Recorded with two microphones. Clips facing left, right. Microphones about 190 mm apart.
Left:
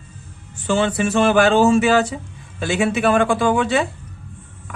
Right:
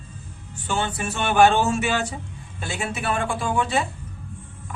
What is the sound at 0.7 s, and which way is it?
A man's voice, 90° left.